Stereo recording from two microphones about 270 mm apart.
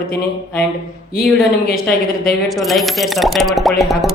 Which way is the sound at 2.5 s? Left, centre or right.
Centre.